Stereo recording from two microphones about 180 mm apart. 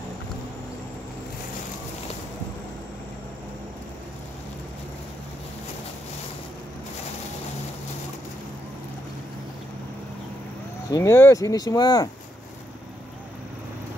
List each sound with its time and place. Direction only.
10.9 s speech: 15° left (ahead or behind)